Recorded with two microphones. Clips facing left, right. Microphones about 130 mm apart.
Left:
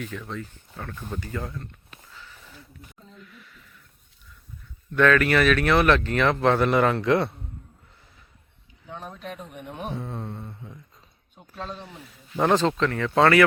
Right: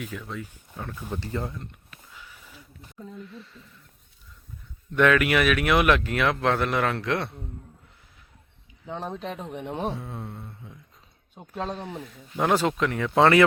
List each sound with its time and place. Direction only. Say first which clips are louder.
0.0 s speech: left 1 dB; 10° right (ahead or behind)
1.3 s speech: right 3 dB; 20° right (ahead or behind)
2.1 s a sound: left 1 dB; 10° right (ahead or behind)
3.2 s a sound: right 7 dB; 30° right (ahead or behind)
4.9 s speech: left 1 dB; 15° right (ahead or behind)
9.2 s speech: right 4 dB; 30° right (ahead or behind)
9.9 s speech: left 3 dB; centre (ahead or behind)
11.3 s speech: right 4 dB; 40° right (ahead or behind)
11.9 s speech: right 7 dB; centre (ahead or behind); by 13.4 s 20° right (ahead or behind)